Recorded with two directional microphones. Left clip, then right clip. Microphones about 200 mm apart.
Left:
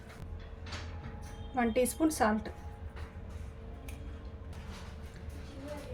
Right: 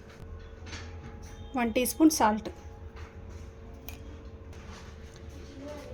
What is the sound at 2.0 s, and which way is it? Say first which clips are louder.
Speech: right 6 dB; 35° right (ahead or behind).